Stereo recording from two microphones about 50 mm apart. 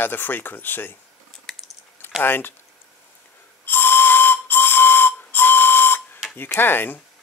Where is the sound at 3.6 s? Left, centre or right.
Left.